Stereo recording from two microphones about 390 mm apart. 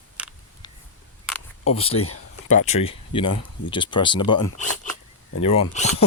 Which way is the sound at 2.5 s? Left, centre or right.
Centre.